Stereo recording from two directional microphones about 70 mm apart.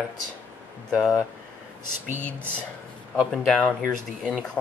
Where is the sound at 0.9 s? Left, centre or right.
Centre.